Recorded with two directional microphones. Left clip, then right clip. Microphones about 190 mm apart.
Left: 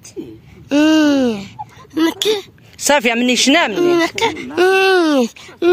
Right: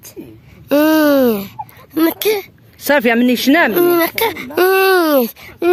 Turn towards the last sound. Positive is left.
turn(degrees=-50)  # may be behind; listen again after turning